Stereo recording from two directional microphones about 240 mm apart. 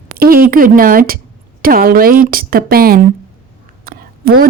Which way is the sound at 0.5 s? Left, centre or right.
Right.